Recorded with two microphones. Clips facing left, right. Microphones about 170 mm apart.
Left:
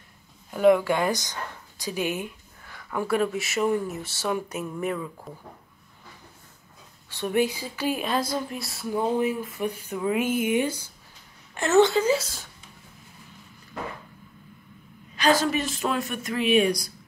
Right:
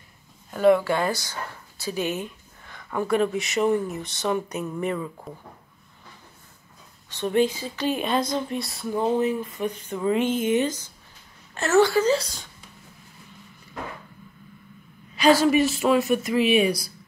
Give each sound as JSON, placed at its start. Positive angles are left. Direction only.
{"t": 0.5, "sound": "speech", "side_deg": 10}
{"t": 7.1, "sound": "a woman's voice", "side_deg": 10}
{"t": 12.0, "sound": "speech", "side_deg": 5}
{"t": 15.1, "sound": "speech", "side_deg": -10}